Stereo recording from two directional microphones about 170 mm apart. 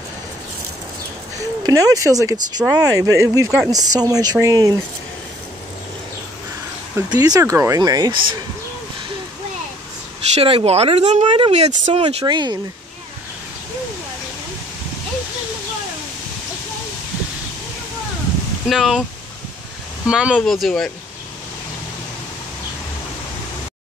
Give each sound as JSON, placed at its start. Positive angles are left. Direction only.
{"t": 1.6, "sound": "speech", "side_deg": -20}
{"t": 7.0, "sound": "speech", "side_deg": -20}
{"t": 10.3, "sound": "speech", "side_deg": -35}
{"t": 12.3, "sound": "speech", "side_deg": -25}
{"t": 18.7, "sound": "speech", "side_deg": 0}
{"t": 20.1, "sound": "speech", "side_deg": -5}